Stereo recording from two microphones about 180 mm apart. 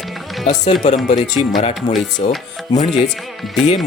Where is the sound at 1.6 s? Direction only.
35° left (ahead or behind).